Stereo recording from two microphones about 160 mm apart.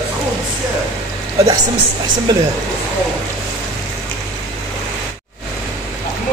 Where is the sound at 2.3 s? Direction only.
25° right (ahead or behind).